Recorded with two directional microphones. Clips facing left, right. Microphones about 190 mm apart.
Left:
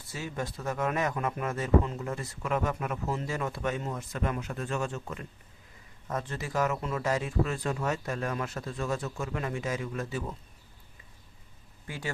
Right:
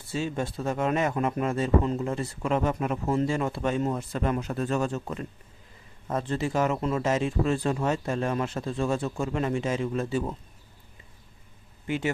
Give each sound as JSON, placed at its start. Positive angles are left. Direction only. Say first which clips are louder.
{"t": 0.1, "sound": "a man's voice", "louder": "right 6 dB", "side_deg": -25}
{"t": 11.9, "sound": "a man's voice", "louder": "right 9 dB", "side_deg": -20}